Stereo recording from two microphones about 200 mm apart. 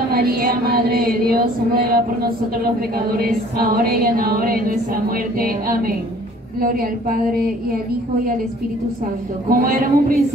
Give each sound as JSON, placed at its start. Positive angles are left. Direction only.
{"t": 0.1, "sound": "music", "side_deg": -50}
{"t": 9.5, "sound": "music", "side_deg": -45}